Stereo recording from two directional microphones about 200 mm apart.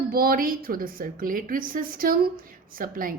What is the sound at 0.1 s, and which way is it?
A woman's voice, 45° right (ahead or behind).